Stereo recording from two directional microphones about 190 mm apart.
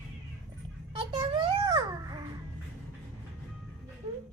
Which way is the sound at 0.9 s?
25° right (ahead or behind).